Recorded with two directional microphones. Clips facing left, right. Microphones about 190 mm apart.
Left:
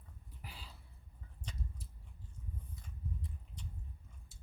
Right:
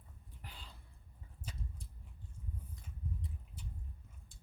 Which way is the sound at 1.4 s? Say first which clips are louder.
Even; 5° right (ahead or behind).